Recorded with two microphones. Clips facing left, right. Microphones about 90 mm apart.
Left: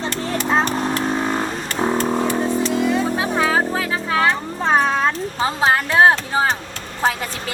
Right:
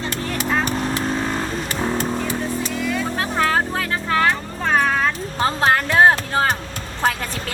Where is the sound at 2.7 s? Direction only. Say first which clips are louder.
Left 5 dB; 25° left (ahead or behind).